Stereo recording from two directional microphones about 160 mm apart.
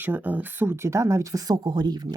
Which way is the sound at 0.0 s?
10° right (ahead or behind).